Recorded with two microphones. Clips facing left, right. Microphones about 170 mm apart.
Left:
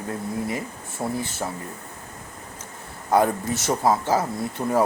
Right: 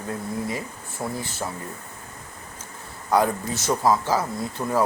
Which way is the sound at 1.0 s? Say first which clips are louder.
Left 2 dB; 25° left (ahead or behind).